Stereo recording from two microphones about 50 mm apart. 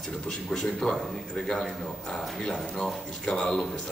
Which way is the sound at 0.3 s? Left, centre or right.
Centre.